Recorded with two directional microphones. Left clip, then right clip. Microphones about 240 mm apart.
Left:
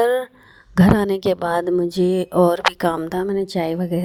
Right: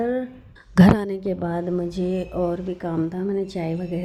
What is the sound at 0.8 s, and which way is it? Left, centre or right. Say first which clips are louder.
Speech: left 2 dB; centre.